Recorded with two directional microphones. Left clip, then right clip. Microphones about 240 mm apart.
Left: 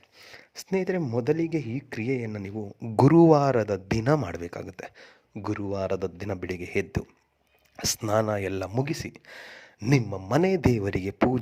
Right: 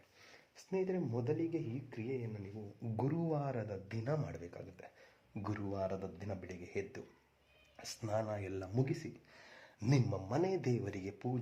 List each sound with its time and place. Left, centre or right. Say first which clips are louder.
0.2 s a man's voice: left 16 dB; left